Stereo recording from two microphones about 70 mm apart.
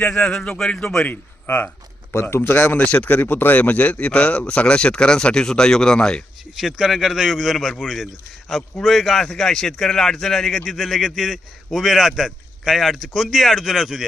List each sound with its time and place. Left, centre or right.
0.0 s a man's voice: centre
1.1 s speech: left
2.8 s a man's voice: centre
6.6 s speech: centre